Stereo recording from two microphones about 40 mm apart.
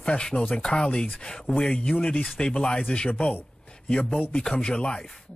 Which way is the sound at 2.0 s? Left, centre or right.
Left.